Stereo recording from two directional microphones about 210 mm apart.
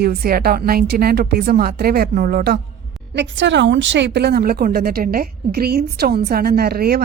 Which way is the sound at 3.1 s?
60° right (ahead or behind).